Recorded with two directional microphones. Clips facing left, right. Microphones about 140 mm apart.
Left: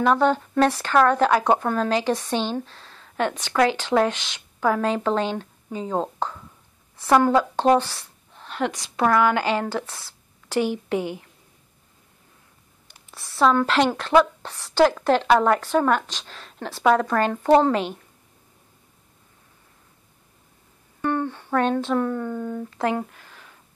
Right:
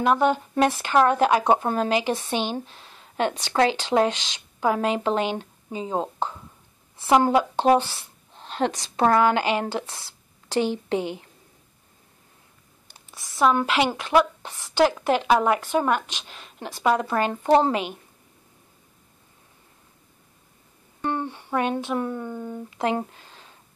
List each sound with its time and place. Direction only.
0.0 s a woman's voice: 10° right (ahead or behind)
13.1 s a woman's voice: 15° right (ahead or behind)
21.0 s speech: 20° right (ahead or behind)
22.9 s a sound: 25° right (ahead or behind)